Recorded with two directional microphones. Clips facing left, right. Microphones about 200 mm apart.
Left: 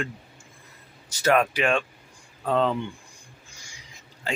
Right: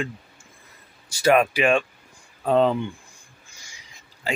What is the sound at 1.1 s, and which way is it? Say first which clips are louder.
Speech: right 3 dB; 10° right (ahead or behind).